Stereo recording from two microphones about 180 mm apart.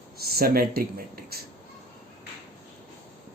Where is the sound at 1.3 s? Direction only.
60° right (ahead or behind).